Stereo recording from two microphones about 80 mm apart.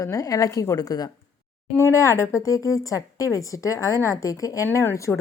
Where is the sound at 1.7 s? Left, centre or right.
Left.